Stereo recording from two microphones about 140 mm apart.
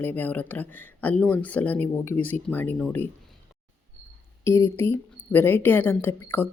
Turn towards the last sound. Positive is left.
turn(degrees=15)  # may be behind; listen again after turning